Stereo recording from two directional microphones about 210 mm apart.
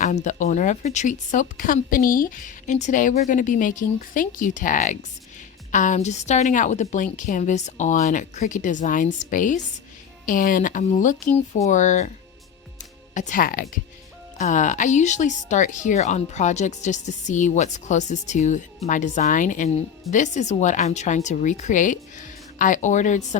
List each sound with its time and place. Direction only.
0.0 s speech: 35° left (ahead or behind)
13.1 s speech: 40° left (ahead or behind)